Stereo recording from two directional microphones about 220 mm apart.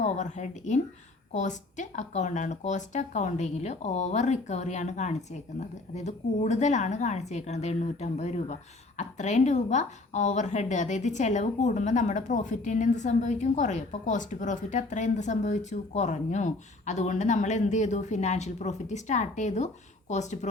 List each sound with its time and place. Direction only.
0.0 s a woman's voice: 30° left (ahead or behind)